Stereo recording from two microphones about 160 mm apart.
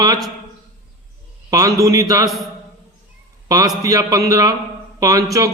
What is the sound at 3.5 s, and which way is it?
A man's voice, 20° right (ahead or behind).